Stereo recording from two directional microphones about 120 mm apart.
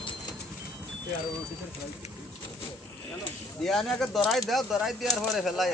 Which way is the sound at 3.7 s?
5° left (ahead or behind).